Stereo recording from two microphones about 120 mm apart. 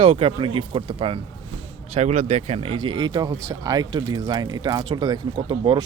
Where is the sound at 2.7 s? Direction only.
40° right (ahead or behind).